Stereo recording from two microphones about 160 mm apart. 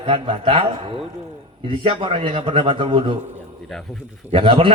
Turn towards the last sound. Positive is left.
turn(degrees=-35)  # may be behind; listen again after turning